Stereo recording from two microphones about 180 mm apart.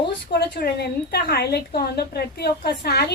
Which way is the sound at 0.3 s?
60° left (ahead or behind).